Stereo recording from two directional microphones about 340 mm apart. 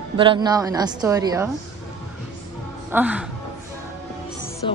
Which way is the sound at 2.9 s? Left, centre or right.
Centre.